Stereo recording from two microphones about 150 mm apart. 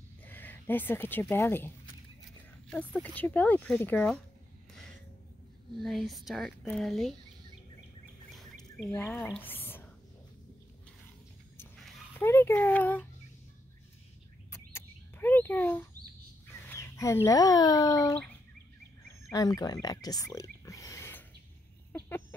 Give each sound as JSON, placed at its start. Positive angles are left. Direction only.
{"t": 0.2, "sound": "speech", "side_deg": 10}
{"t": 3.2, "sound": "speech", "side_deg": 10}
{"t": 5.8, "sound": "speech", "side_deg": 0}
{"t": 8.3, "sound": "bird", "side_deg": 0}
{"t": 8.9, "sound": "speech", "side_deg": 15}
{"t": 12.2, "sound": "speech", "side_deg": 15}
{"t": 14.5, "sound": "a sound", "side_deg": 15}
{"t": 16.6, "sound": "speech", "side_deg": 15}
{"t": 19.3, "sound": "speech", "side_deg": 25}